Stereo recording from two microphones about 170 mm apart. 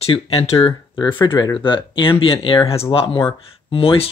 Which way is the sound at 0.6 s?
25° left (ahead or behind).